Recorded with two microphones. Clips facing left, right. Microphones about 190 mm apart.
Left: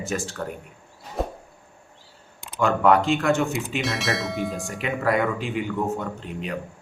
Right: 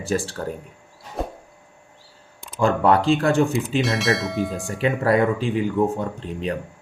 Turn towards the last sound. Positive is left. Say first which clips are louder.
# right 4 dB
turn(degrees=-35)  # may be behind; listen again after turning